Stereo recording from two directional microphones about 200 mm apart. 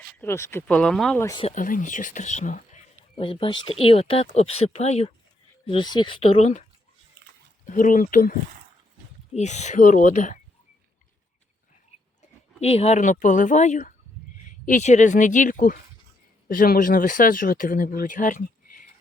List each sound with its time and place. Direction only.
0.2 s speech: 15° left (ahead or behind)
1.2 s speech: 20° left (ahead or behind)
1.5 s speech: 40° left (ahead or behind)
9.3 s speech: 35° left (ahead or behind)
12.5 s speech: 30° left (ahead or behind)